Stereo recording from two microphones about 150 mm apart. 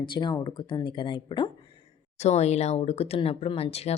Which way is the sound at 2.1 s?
45° left (ahead or behind).